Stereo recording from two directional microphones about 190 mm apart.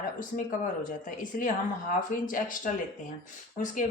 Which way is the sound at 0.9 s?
45° left (ahead or behind).